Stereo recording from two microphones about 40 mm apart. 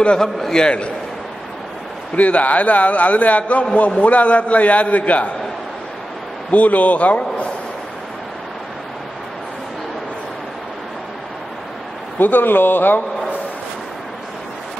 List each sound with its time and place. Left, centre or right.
0.2 s a man's voice: centre
2.1 s a man's voice: left
6.5 s a man's voice: left
12.2 s speech: left